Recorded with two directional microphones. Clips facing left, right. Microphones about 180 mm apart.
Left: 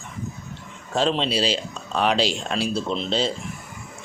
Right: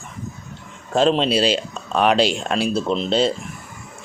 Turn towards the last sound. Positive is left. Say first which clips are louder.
# right 5 dB
turn(degrees=-55)  # may be behind; listen again after turning